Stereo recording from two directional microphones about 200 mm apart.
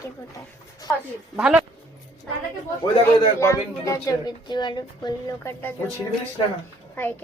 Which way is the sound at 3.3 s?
15° left (ahead or behind).